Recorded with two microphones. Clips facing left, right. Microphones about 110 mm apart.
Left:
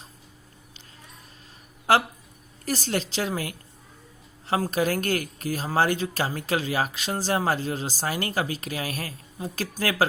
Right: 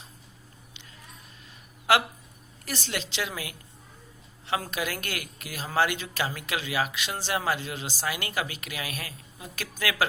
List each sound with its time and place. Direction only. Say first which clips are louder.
2.6 s a woman's voice: left 6 dB; 40° left (ahead or behind)